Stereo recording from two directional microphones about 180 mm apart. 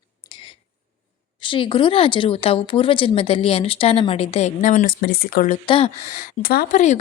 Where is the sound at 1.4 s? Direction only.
25° left (ahead or behind); by 5.4 s 55° left (ahead or behind).